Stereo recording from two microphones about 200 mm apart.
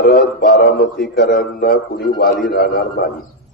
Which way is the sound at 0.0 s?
50° left (ahead or behind).